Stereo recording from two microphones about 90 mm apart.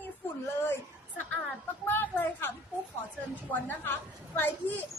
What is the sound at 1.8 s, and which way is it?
A woman's voice, 20° left (ahead or behind).